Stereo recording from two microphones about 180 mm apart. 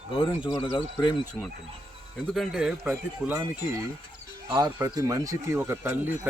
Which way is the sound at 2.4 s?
5° right (ahead or behind).